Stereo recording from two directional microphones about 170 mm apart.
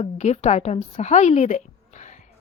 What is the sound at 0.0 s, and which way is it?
A woman's voice, 40° left (ahead or behind).